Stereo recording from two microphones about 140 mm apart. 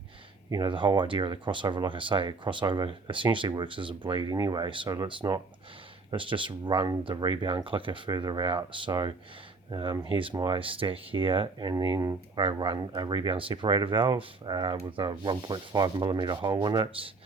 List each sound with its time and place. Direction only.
0.5 s speech: 35° right (ahead or behind)